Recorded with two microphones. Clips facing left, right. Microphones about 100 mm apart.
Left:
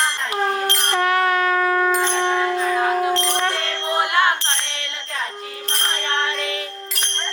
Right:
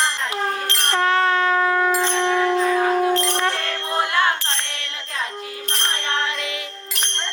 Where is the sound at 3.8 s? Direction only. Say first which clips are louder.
Left 2 dB; 20° left (ahead or behind).